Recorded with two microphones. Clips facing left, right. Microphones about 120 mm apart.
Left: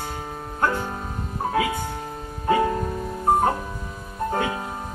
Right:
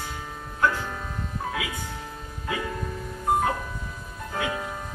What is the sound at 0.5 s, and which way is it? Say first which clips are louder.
Music: left 1 dB; 40° left (ahead or behind).